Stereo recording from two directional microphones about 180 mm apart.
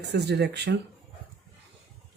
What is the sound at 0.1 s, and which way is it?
Speech, 70° right (ahead or behind).